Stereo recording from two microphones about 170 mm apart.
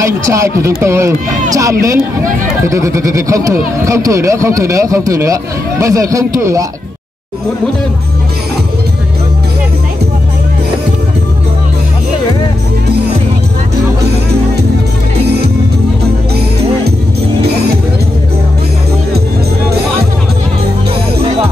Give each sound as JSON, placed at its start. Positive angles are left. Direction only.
{"t": 0.0, "sound": "speech", "side_deg": -15}